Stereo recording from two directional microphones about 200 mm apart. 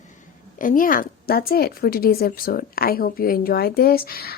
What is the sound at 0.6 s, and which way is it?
Speech, 45° left (ahead or behind).